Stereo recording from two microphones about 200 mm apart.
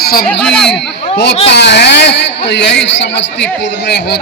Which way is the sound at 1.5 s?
60° left (ahead or behind).